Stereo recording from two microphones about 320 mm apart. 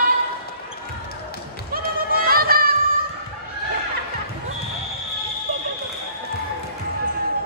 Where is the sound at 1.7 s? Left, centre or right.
Right.